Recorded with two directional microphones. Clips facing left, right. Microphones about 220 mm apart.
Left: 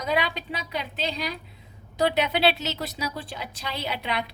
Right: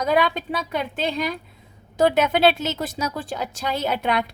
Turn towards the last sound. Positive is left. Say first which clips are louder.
# right 7 dB
turn(degrees=-50)  # may be behind; listen again after turning